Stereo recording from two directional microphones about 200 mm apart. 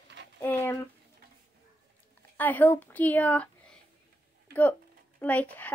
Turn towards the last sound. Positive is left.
turn(degrees=10)  # may be behind; listen again after turning